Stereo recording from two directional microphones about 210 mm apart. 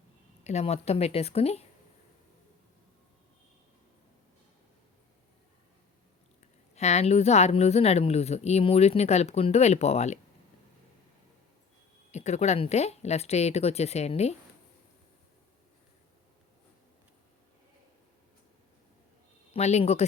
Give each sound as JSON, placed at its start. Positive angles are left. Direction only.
{"t": 0.4, "sound": "speech", "side_deg": 30}
{"t": 6.4, "sound": "speech", "side_deg": 30}
{"t": 12.1, "sound": "speech", "side_deg": 30}
{"t": 19.5, "sound": "speech", "side_deg": 30}